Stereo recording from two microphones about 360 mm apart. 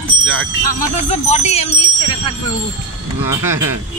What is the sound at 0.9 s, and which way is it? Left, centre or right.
Speech, centre.